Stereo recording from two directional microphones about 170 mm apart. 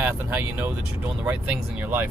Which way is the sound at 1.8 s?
10° right (ahead or behind).